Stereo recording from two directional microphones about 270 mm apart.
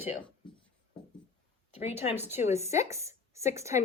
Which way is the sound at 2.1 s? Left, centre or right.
Centre.